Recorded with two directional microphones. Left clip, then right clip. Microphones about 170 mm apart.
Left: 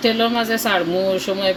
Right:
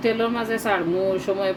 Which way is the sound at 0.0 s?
50° left (ahead or behind).